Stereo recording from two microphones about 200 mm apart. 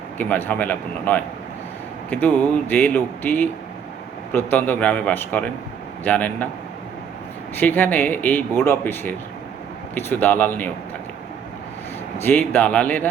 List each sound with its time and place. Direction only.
0.2 s speech: 10° left (ahead or behind)
7.5 s speech: 10° left (ahead or behind)
12.2 s speech: 10° left (ahead or behind)